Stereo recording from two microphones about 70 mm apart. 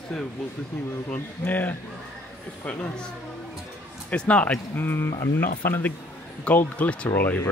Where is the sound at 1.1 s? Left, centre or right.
Left.